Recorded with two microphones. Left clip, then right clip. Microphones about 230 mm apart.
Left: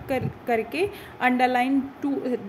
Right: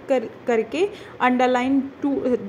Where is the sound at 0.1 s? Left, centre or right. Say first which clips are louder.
Right 4 dB; centre.